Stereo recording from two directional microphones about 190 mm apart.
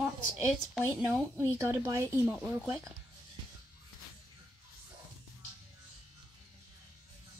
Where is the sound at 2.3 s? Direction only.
Centre (ahead or behind).